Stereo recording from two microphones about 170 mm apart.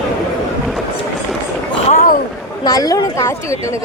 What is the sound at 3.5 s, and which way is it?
Speech, 15° left (ahead or behind).